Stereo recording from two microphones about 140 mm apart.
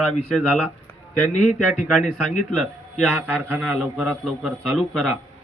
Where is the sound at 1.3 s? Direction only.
55° left (ahead or behind).